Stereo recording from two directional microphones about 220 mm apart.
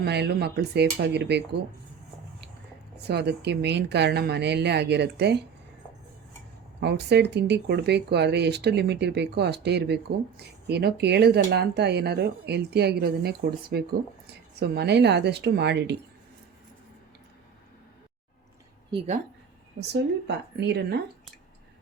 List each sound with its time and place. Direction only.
0.0 s speech: 50° right (ahead or behind)
3.1 s speech: 50° right (ahead or behind)
6.7 s speech: 50° right (ahead or behind)
18.9 s a woman's voice: 25° right (ahead or behind)
19.9 s speech: 50° right (ahead or behind)